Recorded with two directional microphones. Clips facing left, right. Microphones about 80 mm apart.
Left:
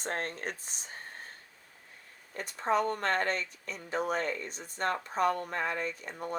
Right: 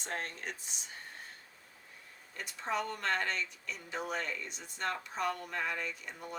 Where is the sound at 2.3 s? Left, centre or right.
Left.